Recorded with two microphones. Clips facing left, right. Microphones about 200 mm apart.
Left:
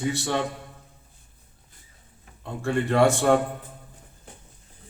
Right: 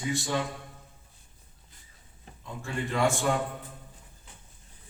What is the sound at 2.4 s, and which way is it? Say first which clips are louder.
Speech: left 9 dB; 70° left (ahead or behind).